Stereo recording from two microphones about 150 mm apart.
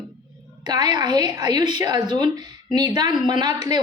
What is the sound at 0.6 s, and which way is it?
A woman's voice, 25° right (ahead or behind).